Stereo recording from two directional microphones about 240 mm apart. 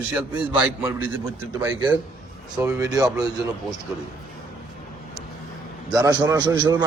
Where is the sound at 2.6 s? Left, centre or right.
Centre.